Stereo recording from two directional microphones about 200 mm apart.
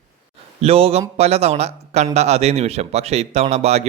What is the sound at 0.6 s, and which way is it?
Speech, 30° right (ahead or behind).